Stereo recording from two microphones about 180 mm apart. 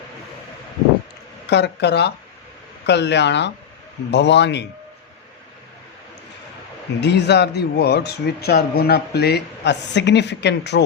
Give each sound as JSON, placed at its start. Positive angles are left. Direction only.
{"t": 1.5, "sound": "speech", "side_deg": 70}
{"t": 7.0, "sound": "speech", "side_deg": 70}